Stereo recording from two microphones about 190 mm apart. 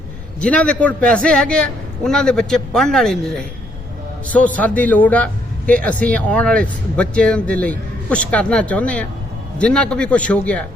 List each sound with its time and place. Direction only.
0.3 s a man's voice: 5° left (ahead or behind)